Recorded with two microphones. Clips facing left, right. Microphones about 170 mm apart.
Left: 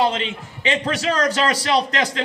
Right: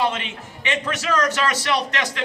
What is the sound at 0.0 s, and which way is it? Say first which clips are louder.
A man's voice: left 3 dB; 30° left (ahead or behind).